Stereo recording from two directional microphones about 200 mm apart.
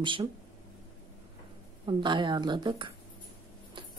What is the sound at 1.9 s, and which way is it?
Speech, 25° right (ahead or behind).